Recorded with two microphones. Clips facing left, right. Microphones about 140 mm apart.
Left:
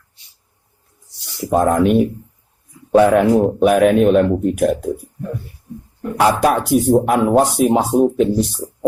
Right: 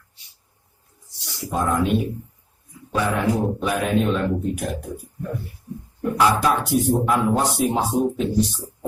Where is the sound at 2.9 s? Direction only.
70° left (ahead or behind).